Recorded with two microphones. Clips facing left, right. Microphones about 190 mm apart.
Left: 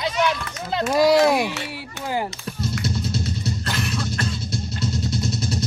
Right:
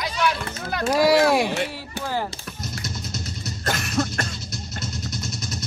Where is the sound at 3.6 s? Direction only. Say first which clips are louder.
Right 2 dB; 50° right (ahead or behind).